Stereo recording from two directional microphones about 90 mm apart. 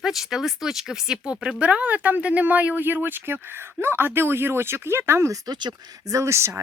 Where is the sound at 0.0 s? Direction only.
5° right (ahead or behind); by 5.4 s 30° right (ahead or behind).